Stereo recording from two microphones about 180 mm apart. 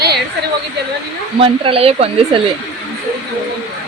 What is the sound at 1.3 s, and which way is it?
Speech, 30° right (ahead or behind).